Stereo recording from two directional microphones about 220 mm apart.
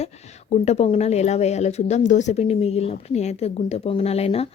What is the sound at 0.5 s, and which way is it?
Speech, 30° left (ahead or behind).